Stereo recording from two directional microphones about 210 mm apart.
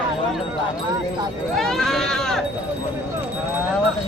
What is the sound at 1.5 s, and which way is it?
Sheep, centre (ahead or behind).